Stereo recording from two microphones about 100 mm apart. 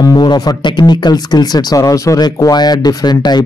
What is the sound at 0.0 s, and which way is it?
A man's voice, 45° left (ahead or behind).